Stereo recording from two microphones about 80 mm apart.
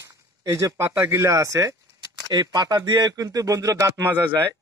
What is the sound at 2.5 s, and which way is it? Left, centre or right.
Speech, right.